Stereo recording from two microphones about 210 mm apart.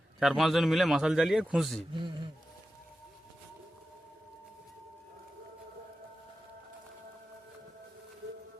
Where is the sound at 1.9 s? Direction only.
20° right (ahead or behind).